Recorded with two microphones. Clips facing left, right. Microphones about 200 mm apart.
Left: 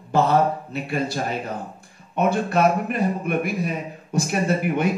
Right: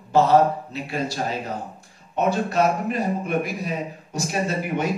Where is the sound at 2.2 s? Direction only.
55° left (ahead or behind).